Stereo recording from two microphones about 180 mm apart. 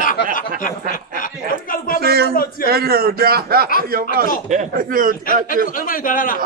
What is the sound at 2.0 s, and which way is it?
Speech, 60° right (ahead or behind).